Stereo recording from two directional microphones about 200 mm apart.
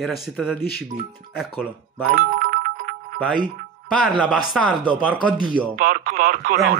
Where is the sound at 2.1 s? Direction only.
45° right (ahead or behind).